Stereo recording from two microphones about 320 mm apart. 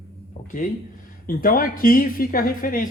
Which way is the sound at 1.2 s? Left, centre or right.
Left.